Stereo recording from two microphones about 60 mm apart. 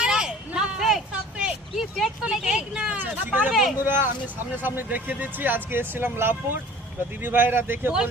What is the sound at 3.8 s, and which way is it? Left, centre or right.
Speech, right.